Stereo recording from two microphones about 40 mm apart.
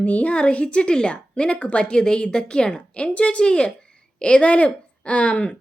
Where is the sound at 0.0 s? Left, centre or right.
Left.